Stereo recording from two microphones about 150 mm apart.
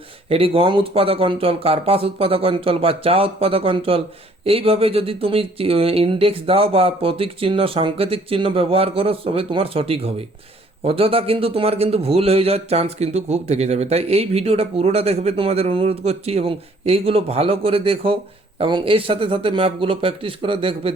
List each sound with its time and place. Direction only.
0.3 s a man's voice: 40° right (ahead or behind)